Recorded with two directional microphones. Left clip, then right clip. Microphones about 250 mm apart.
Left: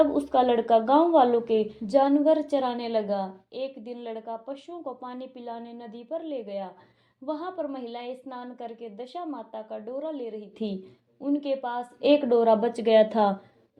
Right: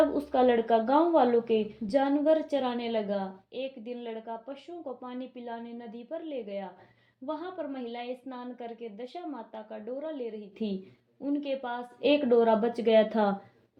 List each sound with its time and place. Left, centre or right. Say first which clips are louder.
0.3 s a woman's voice: left 3 dB; centre